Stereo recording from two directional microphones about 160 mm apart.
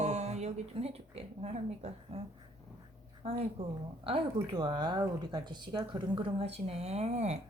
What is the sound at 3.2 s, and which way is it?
Speech, 40° right (ahead or behind).